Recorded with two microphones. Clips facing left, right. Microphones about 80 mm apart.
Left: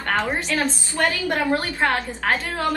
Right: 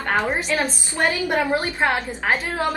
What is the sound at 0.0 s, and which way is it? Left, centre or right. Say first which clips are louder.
A woman's voice: right 1 dB; centre.